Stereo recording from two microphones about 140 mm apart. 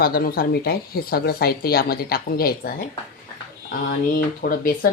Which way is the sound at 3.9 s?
75° left (ahead or behind).